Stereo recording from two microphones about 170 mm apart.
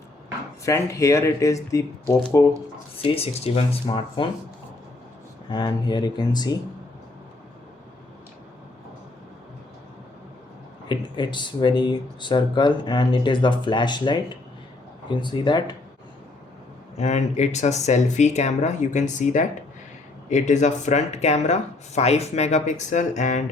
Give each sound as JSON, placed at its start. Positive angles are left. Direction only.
{"t": 0.6, "sound": "speech", "side_deg": 20}
{"t": 2.9, "sound": "speech", "side_deg": 35}
{"t": 5.5, "sound": "speech", "side_deg": 25}
{"t": 10.8, "sound": "speech", "side_deg": 25}
{"t": 17.0, "sound": "speech", "side_deg": 40}